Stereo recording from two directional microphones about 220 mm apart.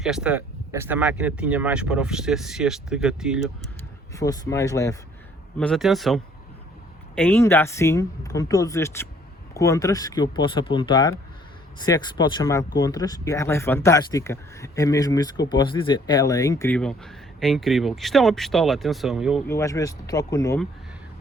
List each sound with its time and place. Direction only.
0.0 s speech: 5° right (ahead or behind)
4.1 s speech: 15° left (ahead or behind)
5.5 s speech: centre (ahead or behind)
19.5 s speech: 15° left (ahead or behind)